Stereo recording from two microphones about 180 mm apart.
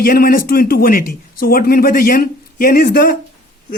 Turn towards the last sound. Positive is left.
turn(degrees=50)  # may be behind; listen again after turning